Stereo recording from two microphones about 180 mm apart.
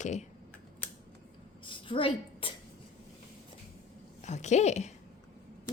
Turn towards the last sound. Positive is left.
turn(degrees=40)  # may be behind; listen again after turning